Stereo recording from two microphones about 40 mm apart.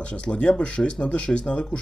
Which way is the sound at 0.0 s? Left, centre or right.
Left.